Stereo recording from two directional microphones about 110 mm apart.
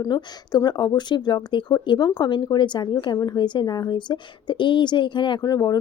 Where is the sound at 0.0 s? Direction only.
40° left (ahead or behind).